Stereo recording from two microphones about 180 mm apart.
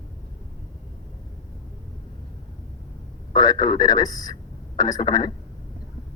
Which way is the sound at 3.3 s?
20° left (ahead or behind).